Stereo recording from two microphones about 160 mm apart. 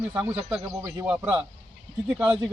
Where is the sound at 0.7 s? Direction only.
20° right (ahead or behind).